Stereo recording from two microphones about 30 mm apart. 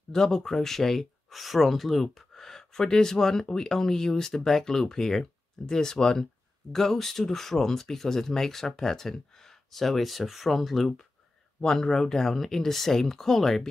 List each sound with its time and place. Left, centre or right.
0.1 s speech: centre
1.3 s speech: centre
11.6 s speech: centre